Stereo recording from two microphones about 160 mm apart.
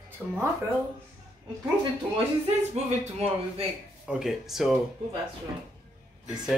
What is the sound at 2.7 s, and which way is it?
Speech, 40° right (ahead or behind).